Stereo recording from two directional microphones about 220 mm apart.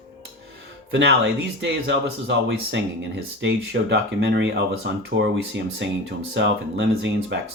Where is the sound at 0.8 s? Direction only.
55° right (ahead or behind).